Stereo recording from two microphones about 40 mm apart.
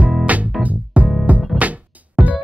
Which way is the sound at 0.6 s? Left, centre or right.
Right.